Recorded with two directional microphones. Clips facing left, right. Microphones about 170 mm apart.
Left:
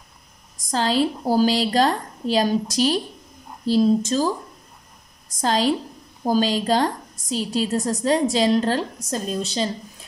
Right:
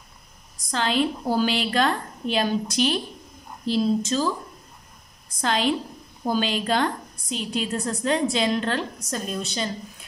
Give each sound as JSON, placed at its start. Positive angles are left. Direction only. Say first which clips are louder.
{"t": 0.7, "sound": "a woman's voice", "louder": "left 3 dB", "side_deg": 35}
{"t": 5.4, "sound": "a woman's voice", "louder": "left 3 dB", "side_deg": 35}